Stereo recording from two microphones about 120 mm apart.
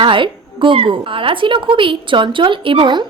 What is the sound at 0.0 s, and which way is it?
A woman's voice, 45° right (ahead or behind).